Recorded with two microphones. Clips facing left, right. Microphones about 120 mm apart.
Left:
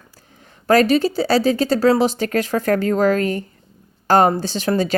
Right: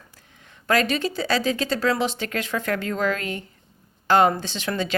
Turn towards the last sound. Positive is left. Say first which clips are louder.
# left 7 dB
turn(degrees=40)  # may be behind; listen again after turning